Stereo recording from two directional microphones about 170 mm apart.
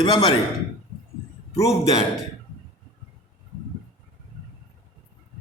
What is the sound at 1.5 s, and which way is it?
Speech, 20° left (ahead or behind).